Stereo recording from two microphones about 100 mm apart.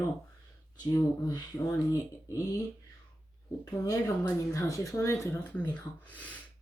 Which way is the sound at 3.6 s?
35° left (ahead or behind).